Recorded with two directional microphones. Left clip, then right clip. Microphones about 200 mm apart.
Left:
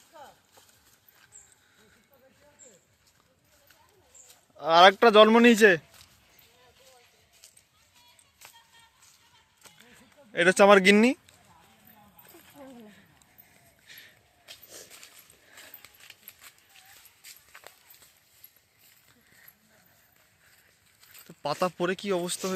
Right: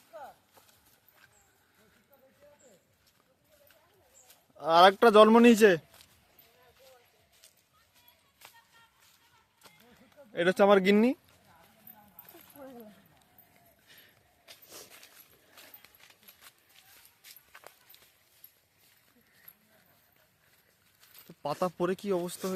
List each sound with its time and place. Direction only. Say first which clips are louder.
4.5 s a man's voice: left 3 dB; 10° right (ahead or behind)
10.3 s speech: left 5 dB; centre (ahead or behind)
13.8 s a sound: left 9 dB; 20° right (ahead or behind)
15.6 s a sound: left 7 dB; centre (ahead or behind)
17.5 s walk: left 2 dB; centre (ahead or behind)
21.2 s speech: left 3 dB; 10° right (ahead or behind)